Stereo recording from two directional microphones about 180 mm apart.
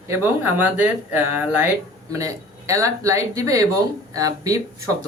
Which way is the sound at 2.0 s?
20° right (ahead or behind).